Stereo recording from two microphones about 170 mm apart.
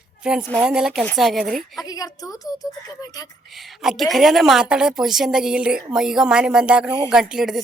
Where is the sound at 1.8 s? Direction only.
20° left (ahead or behind).